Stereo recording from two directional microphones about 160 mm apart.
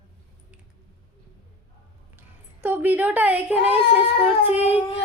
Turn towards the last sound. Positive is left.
turn(degrees=-10)  # may be behind; listen again after turning